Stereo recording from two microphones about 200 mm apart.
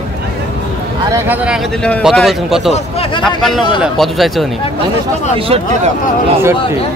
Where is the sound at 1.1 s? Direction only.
10° right (ahead or behind).